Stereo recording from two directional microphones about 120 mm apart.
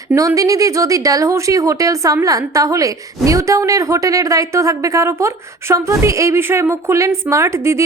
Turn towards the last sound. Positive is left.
turn(degrees=-25)  # may be behind; listen again after turning